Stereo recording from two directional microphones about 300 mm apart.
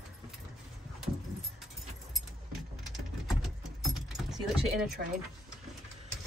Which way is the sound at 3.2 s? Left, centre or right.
Centre.